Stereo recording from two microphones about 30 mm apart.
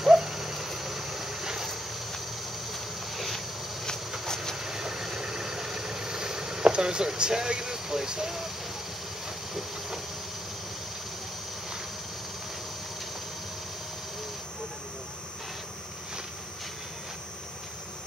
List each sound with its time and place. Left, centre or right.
0.0 s a sound: centre
2.7 s insect: centre
4.6 s vehicle: centre
9.5 s hiss: centre